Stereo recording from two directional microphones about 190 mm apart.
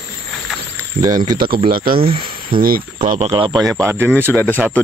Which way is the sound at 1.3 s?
50° right (ahead or behind).